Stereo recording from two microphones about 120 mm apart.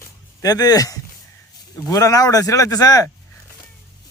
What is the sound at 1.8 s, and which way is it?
Speech, 30° left (ahead or behind).